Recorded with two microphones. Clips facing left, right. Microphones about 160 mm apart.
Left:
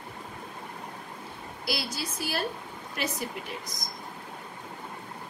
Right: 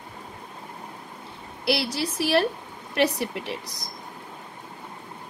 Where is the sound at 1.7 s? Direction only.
70° right (ahead or behind).